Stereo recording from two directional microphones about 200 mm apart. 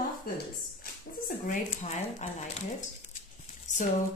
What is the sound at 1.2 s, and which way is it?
A woman's voice, 40° left (ahead or behind).